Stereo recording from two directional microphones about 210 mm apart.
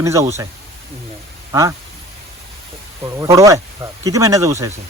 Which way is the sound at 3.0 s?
15° right (ahead or behind).